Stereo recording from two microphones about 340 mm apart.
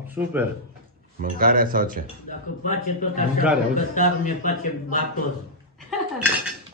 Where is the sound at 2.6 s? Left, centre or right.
Left.